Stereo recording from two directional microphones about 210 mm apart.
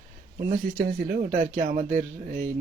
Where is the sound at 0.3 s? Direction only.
40° right (ahead or behind).